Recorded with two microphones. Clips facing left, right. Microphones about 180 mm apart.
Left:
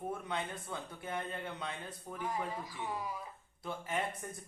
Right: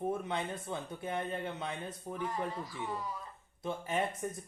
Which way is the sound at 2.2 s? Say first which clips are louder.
Right 1 dB; 10° left (ahead or behind).